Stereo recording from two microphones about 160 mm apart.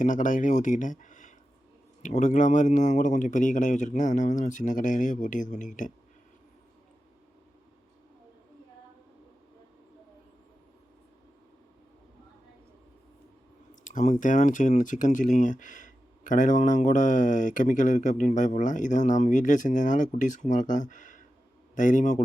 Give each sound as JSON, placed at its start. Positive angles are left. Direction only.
{"t": 0.0, "sound": "speech", "side_deg": 55}
{"t": 13.8, "sound": "speech", "side_deg": 50}